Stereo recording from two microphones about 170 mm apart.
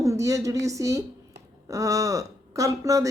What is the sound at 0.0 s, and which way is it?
A woman's voice, 20° right (ahead or behind).